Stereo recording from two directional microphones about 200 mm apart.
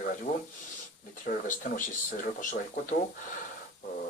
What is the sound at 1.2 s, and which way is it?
Speech, 40° left (ahead or behind).